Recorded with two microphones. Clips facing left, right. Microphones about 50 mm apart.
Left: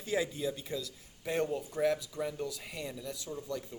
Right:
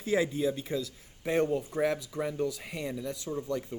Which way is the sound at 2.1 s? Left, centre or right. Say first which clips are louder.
Right 5 dB; right.